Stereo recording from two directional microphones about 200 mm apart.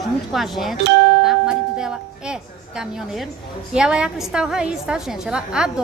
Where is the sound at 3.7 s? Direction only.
5° right (ahead or behind).